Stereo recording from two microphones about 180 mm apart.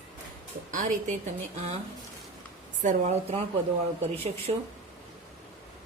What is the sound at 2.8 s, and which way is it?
Speech, 40° right (ahead or behind).